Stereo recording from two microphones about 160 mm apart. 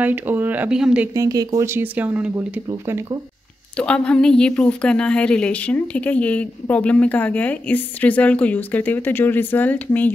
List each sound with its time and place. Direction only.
0.0 s speech: 10° right (ahead or behind)
1.1 s speech: 20° right (ahead or behind)
2.7 s speech: 25° right (ahead or behind)
3.7 s a woman's voice: 5° left (ahead or behind)